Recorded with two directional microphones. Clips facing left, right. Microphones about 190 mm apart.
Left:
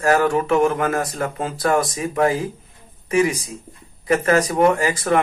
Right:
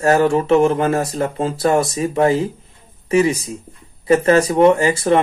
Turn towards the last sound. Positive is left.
turn(degrees=-25)  # may be behind; listen again after turning